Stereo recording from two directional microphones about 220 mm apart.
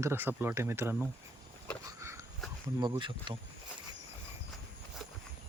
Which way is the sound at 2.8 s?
20° right (ahead or behind).